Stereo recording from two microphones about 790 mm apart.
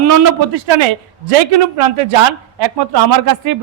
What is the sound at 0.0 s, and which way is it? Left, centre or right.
Speech, right.